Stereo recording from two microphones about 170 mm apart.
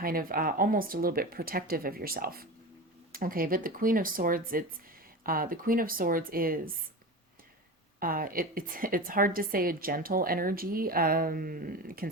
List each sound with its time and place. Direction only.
0.0 s a woman's voice: 60° right (ahead or behind)
7.9 s a woman's voice: 55° right (ahead or behind)